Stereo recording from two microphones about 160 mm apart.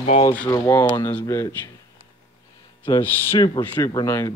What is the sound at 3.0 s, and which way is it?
Speech, 15° left (ahead or behind).